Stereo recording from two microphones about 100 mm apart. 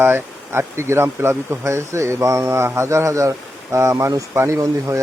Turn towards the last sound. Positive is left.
turn(degrees=-30)  # may be behind; listen again after turning